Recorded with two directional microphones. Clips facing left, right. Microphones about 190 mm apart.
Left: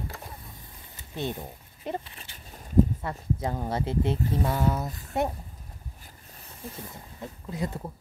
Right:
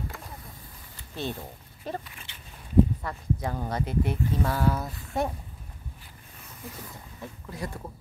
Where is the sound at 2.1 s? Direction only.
40° left (ahead or behind).